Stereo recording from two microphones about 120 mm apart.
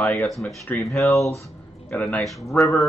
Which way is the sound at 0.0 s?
10° left (ahead or behind).